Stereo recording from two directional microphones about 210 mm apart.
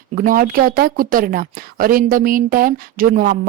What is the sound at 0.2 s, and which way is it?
Speech, 40° right (ahead or behind).